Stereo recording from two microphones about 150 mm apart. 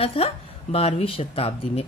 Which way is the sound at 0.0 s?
40° left (ahead or behind).